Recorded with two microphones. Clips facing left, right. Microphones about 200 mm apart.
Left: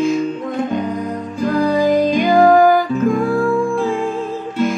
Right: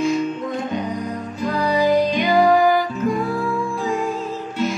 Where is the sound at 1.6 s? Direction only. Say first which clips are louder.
Left 3 dB; 50° left (ahead or behind).